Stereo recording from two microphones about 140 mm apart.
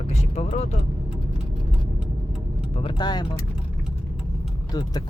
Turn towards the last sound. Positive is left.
turn(degrees=30)  # may be behind; listen again after turning